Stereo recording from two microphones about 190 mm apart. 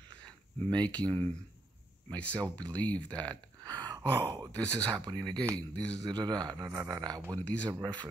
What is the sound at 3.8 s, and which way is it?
Gasp, 20° right (ahead or behind).